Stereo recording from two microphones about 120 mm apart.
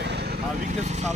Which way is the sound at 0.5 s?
70° right (ahead or behind).